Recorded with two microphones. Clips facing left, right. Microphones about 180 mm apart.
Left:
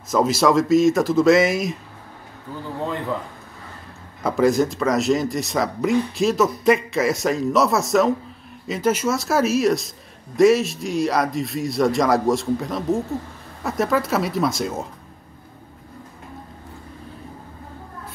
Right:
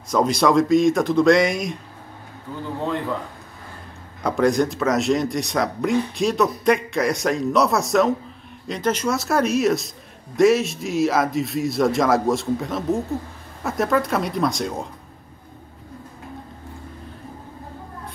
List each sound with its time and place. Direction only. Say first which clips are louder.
0.1 s a man's voice: even; centre (ahead or behind)
4.2 s a man's voice: left 1 dB; centre (ahead or behind)